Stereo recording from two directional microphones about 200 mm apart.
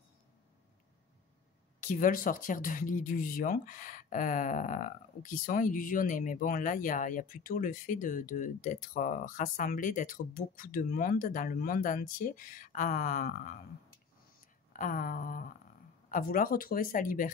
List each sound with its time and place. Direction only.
1.8 s speech: 40° left (ahead or behind)
14.7 s speech: 45° left (ahead or behind)